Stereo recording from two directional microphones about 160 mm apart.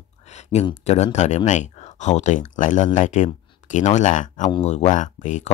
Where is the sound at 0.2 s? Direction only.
45° left (ahead or behind).